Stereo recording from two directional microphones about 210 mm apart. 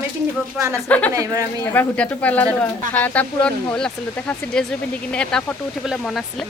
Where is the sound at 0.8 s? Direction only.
5° left (ahead or behind).